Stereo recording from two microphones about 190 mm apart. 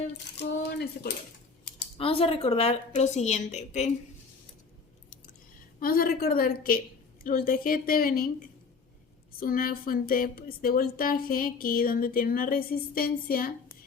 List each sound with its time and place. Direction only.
0.3 s speech: 60° left (ahead or behind)
2.0 s a woman's voice: 30° left (ahead or behind)
5.8 s speech: 50° left (ahead or behind)
9.4 s speech: 50° left (ahead or behind)